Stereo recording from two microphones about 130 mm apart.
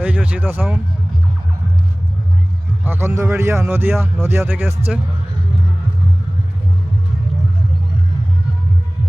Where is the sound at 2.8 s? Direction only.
20° right (ahead or behind).